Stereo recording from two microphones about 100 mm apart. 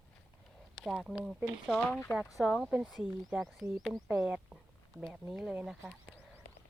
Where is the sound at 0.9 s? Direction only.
5° left (ahead or behind).